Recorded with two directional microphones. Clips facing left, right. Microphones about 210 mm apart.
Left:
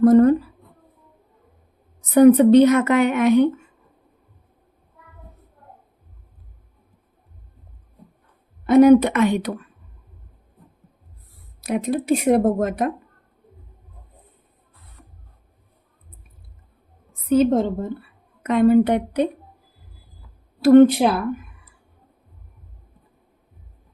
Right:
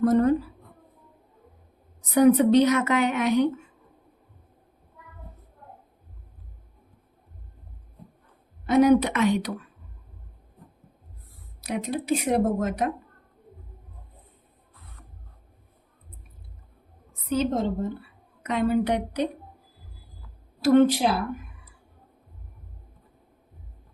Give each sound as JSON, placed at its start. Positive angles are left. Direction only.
{"t": 0.0, "sound": "speech", "side_deg": 50}
{"t": 2.1, "sound": "speech", "side_deg": 55}
{"t": 8.6, "sound": "speech", "side_deg": 55}
{"t": 11.6, "sound": "speech", "side_deg": 50}
{"t": 17.2, "sound": "a woman's voice", "side_deg": 55}
{"t": 20.6, "sound": "speech", "side_deg": 60}